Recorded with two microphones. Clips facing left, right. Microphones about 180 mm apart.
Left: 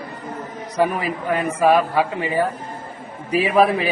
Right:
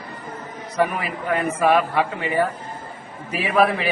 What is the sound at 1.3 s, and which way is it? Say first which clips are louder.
A man's voice: left 2 dB; 10° left (ahead or behind).